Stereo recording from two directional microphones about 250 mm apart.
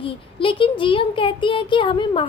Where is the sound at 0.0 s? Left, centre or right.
Left.